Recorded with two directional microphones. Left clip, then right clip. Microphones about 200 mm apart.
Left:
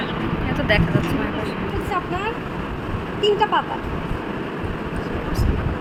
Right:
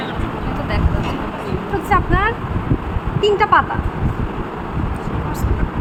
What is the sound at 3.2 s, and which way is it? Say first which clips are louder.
Speech: right 5 dB; 30° right (ahead or behind).